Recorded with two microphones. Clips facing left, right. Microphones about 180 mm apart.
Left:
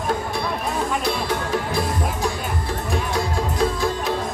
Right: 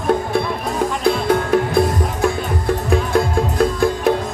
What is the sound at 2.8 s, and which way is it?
Music, 55° right (ahead or behind).